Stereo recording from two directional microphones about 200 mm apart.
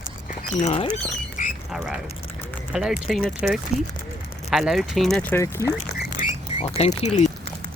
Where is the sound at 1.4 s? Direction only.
40° left (ahead or behind).